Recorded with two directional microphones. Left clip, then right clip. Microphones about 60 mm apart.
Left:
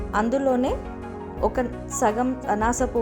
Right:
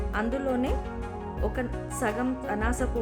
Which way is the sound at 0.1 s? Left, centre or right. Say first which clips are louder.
Left 8 dB; left.